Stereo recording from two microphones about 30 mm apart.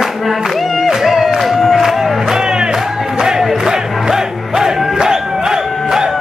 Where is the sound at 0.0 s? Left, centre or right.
Centre.